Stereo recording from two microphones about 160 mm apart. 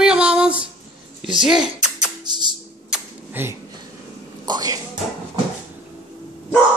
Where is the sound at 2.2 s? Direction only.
25° right (ahead or behind).